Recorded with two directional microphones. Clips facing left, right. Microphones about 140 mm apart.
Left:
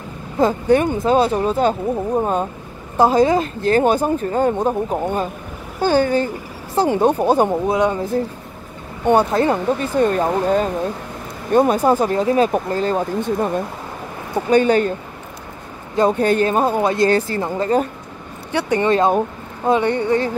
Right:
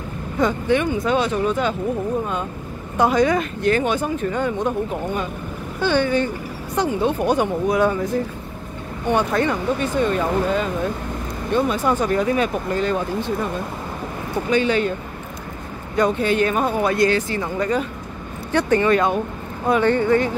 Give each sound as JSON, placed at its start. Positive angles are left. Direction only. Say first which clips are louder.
{"t": 0.4, "sound": "speech", "louder": "left 4 dB", "side_deg": 35}
{"t": 3.0, "sound": "speech", "louder": "left 3 dB", "side_deg": 30}
{"t": 14.5, "sound": "speech", "louder": "left 5 dB", "side_deg": 45}
{"t": 16.1, "sound": "speech", "louder": "left 5 dB", "side_deg": 40}
{"t": 17.1, "sound": "speech", "louder": "left 3 dB", "side_deg": 35}
{"t": 18.5, "sound": "speech", "louder": "right 1 dB", "side_deg": 15}
{"t": 18.9, "sound": "speech", "louder": "left 2 dB", "side_deg": 30}